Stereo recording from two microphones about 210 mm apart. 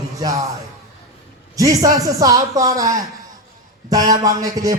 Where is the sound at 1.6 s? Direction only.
15° right (ahead or behind).